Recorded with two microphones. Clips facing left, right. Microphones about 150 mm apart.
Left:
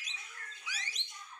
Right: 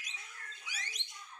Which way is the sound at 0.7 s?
50° right (ahead or behind).